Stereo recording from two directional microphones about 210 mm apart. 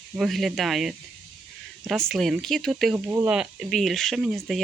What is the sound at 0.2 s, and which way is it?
Speech, centre (ahead or behind).